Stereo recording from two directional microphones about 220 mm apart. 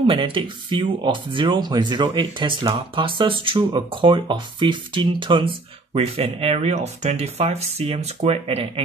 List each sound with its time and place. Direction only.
0.1 s speech: 20° right (ahead or behind)